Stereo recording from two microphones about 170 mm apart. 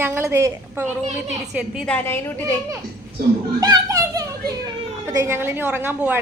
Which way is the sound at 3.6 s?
20° right (ahead or behind).